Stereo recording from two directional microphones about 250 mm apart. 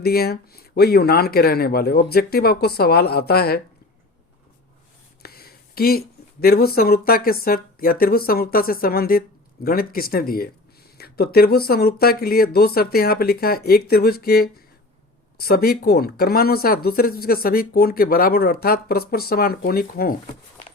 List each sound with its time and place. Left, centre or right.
0.0 s speech: left
5.2 s speech: left